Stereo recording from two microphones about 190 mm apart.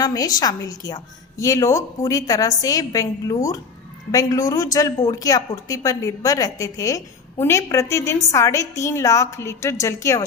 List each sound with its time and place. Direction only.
0.0 s a woman's voice: 20° left (ahead or behind)